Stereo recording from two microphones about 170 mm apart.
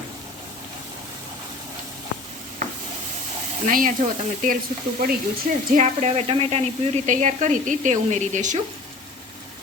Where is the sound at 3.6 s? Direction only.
50° right (ahead or behind).